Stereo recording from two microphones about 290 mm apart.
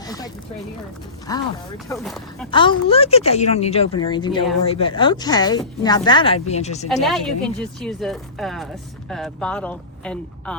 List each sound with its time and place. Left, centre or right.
1.3 s speech: centre
1.9 s speech: centre
2.5 s speech: centre
6.8 s speech: centre